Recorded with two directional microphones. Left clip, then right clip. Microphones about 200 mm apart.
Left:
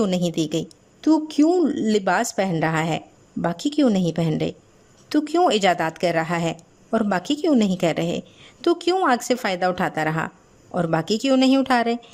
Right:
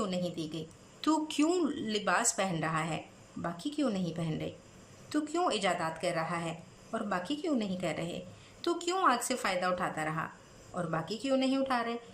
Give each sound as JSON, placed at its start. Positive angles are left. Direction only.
{"t": 0.0, "sound": "a woman's voice", "side_deg": 50}
{"t": 1.0, "sound": "a woman's voice", "side_deg": 30}